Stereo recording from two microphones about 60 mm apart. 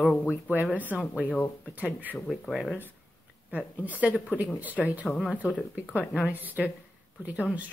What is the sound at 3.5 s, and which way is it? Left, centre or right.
Speech, right.